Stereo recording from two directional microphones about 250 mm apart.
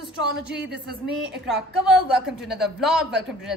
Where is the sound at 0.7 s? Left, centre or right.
Right.